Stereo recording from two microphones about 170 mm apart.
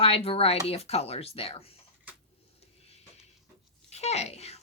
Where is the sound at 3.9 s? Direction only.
40° left (ahead or behind).